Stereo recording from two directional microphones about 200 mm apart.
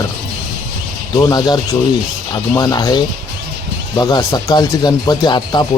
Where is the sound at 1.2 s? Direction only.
20° left (ahead or behind).